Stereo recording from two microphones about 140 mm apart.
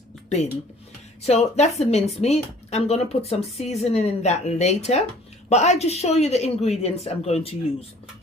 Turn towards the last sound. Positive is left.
turn(degrees=45)  # may be behind; listen again after turning